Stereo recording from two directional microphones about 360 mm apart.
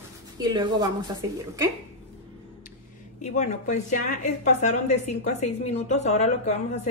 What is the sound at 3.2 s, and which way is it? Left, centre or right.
A woman's voice, centre.